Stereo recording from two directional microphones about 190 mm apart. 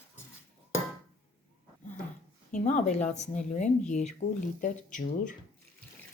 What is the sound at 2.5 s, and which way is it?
Speech, 40° left (ahead or behind).